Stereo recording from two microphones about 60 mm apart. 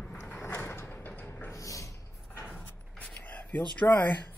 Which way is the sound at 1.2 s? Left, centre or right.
Left.